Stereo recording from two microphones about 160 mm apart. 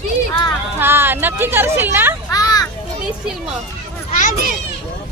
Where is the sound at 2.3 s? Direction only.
25° left (ahead or behind).